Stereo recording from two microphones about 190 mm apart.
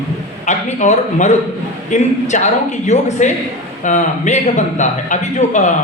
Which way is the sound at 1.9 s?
40° left (ahead or behind).